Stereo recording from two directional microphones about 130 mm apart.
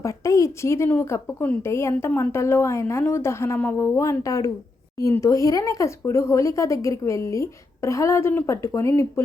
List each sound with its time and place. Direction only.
0.0 s a woman's voice: 25° left (ahead or behind)